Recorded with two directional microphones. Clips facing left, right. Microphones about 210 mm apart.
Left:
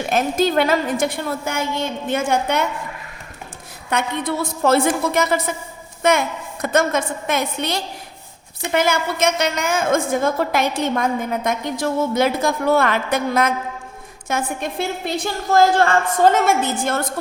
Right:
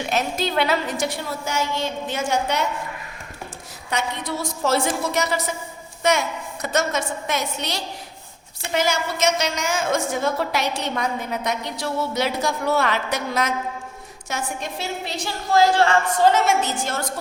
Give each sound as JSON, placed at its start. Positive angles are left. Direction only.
{"t": 0.0, "sound": "a woman's voice", "side_deg": 50}
{"t": 3.8, "sound": "a woman's voice", "side_deg": 55}